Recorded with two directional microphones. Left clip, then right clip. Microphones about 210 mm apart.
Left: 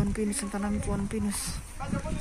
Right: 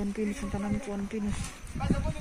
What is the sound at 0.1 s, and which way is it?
Speech, centre (ahead or behind).